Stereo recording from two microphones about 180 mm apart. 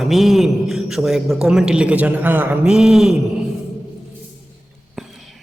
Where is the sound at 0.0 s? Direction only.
Centre (ahead or behind).